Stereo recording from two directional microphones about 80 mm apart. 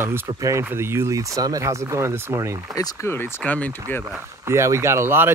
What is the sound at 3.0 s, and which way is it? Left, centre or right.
Speech, left.